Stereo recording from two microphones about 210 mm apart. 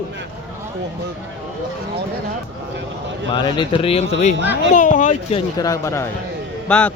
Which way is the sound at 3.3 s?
20° left (ahead or behind).